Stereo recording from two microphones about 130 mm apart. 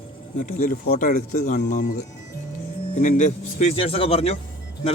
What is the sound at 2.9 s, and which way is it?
Speech, 75° left (ahead or behind).